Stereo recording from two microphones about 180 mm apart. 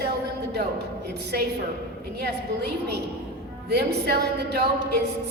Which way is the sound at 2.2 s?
65° right (ahead or behind).